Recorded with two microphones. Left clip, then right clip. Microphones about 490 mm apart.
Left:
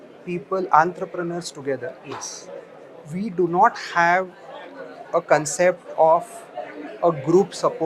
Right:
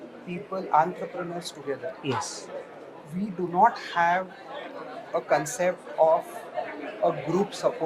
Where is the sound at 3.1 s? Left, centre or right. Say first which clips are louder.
Left 5 dB; left.